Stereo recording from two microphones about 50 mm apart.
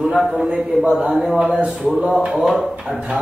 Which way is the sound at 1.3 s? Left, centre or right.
Right.